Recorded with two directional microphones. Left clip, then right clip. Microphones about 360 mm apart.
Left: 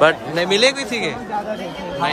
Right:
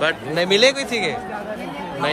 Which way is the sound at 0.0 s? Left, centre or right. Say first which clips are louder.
Left 5 dB; centre.